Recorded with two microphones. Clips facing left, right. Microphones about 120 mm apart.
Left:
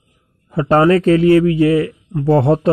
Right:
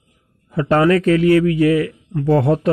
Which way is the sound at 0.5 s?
30° left (ahead or behind).